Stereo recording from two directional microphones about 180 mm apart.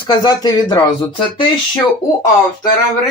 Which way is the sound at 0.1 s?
20° left (ahead or behind).